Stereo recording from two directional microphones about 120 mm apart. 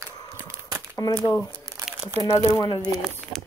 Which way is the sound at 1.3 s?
30° left (ahead or behind).